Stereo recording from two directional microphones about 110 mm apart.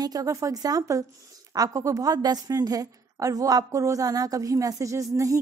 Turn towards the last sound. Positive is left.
turn(degrees=-30)  # may be behind; listen again after turning